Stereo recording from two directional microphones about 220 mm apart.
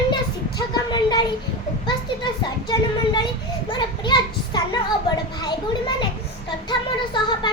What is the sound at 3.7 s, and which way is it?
Children playing, 20° left (ahead or behind).